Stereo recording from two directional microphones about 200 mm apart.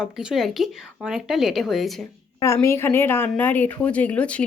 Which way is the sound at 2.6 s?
10° left (ahead or behind).